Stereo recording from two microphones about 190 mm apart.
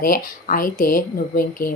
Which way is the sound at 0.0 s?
50° left (ahead or behind).